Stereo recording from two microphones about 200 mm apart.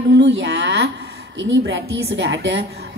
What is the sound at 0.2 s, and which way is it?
A woman's voice, 65° right (ahead or behind).